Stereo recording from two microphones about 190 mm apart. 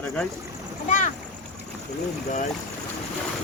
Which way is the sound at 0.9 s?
40° left (ahead or behind).